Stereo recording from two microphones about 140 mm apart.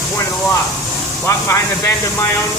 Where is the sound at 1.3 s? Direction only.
20° left (ahead or behind).